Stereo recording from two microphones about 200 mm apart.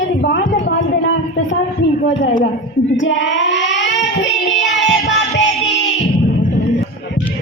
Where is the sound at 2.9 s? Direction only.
65° left (ahead or behind).